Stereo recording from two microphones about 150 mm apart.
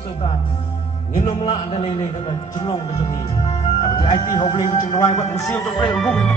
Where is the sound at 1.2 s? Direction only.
35° left (ahead or behind).